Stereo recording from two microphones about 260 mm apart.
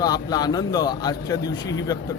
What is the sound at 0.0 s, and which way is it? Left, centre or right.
A man's voice, centre.